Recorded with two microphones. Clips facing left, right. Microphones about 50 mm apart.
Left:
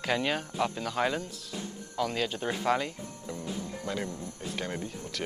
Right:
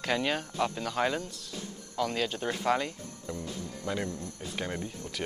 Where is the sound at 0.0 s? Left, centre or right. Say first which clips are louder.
Even; centre.